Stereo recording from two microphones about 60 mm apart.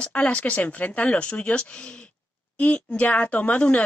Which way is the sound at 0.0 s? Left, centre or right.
Left.